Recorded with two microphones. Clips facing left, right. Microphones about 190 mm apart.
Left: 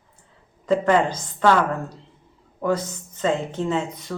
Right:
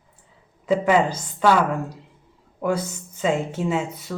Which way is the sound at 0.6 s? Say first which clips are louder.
Even; 5° right (ahead or behind).